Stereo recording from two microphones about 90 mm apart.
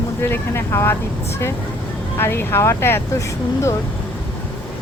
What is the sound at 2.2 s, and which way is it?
Speech, 25° left (ahead or behind).